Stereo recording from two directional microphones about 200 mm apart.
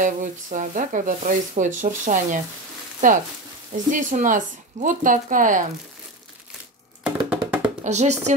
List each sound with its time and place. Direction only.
0.0 s speech: 40° right (ahead or behind)
7.0 s music: 5° right (ahead or behind)
7.8 s speech: 35° right (ahead or behind)